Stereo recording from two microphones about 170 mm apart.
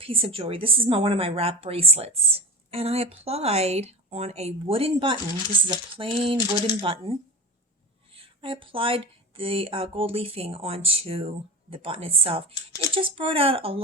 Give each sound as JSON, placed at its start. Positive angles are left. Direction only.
{"t": 0.0, "sound": "speech", "side_deg": -30}
{"t": 8.1, "sound": "speech", "side_deg": -30}